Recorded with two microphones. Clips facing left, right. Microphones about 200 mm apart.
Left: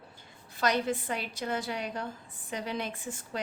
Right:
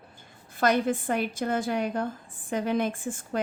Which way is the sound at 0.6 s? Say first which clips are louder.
Right 5 dB; 50° right (ahead or behind).